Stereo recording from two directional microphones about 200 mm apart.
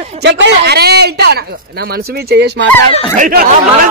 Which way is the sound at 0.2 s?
60° right (ahead or behind).